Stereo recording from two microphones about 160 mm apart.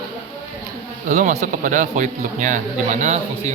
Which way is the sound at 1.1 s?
50° right (ahead or behind).